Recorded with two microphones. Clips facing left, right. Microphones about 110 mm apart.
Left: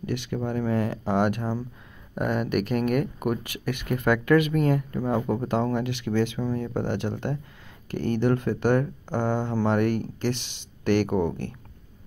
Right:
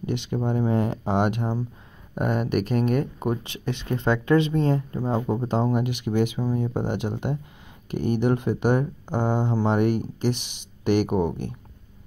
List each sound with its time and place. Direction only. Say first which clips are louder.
0.0 s speech: right 2 dB; 20° right (ahead or behind)